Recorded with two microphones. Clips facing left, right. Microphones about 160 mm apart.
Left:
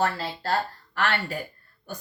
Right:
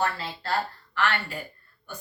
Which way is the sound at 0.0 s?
35° left (ahead or behind).